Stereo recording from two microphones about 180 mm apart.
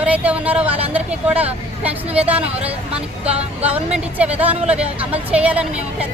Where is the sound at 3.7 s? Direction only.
10° right (ahead or behind).